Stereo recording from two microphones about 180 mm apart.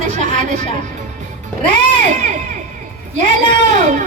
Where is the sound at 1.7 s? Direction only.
40° right (ahead or behind).